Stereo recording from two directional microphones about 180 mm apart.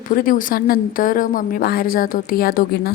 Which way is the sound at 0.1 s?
50° left (ahead or behind).